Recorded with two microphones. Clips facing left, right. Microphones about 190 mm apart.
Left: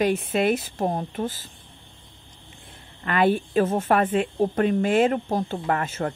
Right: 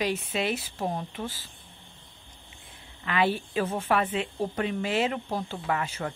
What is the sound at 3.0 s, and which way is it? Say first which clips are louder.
A woman's voice: left 5 dB; 50° left (ahead or behind).